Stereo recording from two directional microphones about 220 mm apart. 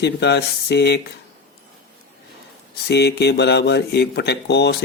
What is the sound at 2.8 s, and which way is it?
Speech, 50° left (ahead or behind).